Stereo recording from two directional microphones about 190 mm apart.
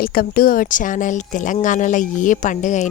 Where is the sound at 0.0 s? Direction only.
50° left (ahead or behind).